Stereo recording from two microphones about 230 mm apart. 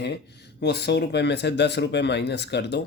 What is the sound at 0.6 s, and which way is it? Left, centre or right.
Speech, left.